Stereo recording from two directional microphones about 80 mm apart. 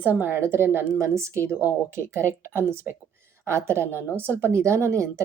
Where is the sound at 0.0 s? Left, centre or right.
Right.